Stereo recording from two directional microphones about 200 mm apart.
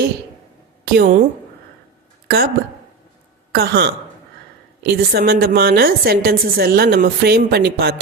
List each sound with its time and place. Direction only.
0.9 s a woman's voice: 45° right (ahead or behind)
2.2 s a woman's voice: 50° right (ahead or behind)
3.5 s a woman's voice: 50° right (ahead or behind)